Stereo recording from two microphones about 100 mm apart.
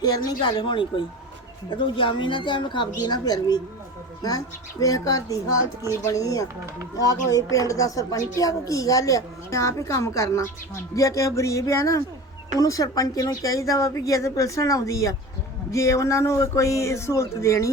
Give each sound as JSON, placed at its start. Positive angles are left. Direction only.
{"t": 0.3, "sound": "a woman's voice", "side_deg": 45}